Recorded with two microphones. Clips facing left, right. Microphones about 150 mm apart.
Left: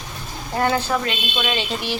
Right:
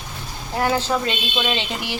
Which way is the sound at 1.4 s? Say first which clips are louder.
Left 1 dB; 20° right (ahead or behind).